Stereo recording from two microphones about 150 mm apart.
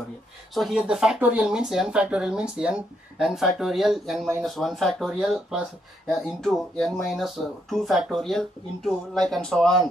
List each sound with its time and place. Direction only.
0.6 s speech: 5° right (ahead or behind)